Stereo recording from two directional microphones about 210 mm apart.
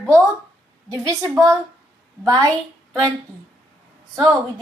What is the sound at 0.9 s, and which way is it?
A woman's voice, 15° right (ahead or behind).